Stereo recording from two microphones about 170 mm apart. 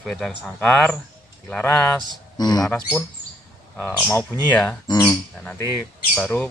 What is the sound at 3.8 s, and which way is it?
Speech, 5° left (ahead or behind).